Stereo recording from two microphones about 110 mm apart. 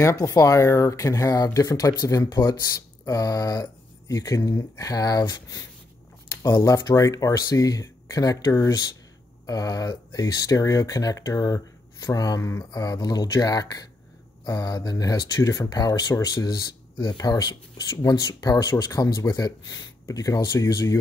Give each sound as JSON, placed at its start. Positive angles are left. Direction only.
{"t": 0.0, "sound": "speech", "side_deg": 30}